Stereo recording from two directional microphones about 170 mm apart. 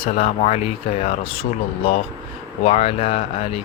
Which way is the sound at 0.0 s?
40° left (ahead or behind).